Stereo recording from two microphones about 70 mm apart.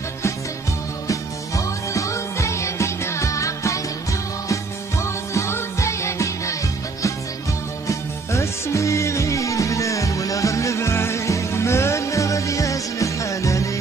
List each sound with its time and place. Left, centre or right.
1.0 s music: left
5.0 s music: left
7.8 s music: left